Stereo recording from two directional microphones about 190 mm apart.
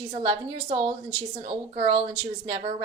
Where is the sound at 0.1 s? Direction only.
25° right (ahead or behind).